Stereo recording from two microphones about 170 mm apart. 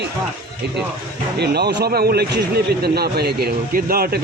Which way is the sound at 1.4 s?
70° right (ahead or behind).